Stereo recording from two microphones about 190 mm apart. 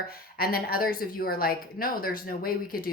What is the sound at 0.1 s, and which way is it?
Speech, 50° left (ahead or behind).